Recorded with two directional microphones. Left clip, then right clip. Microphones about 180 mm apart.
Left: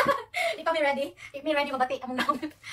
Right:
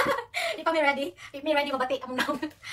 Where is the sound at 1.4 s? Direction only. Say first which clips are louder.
Even; 10° right (ahead or behind).